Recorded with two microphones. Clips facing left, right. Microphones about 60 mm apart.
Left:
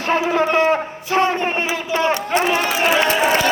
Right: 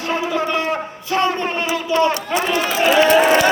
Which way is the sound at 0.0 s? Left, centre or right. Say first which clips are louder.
Left 3 dB; left.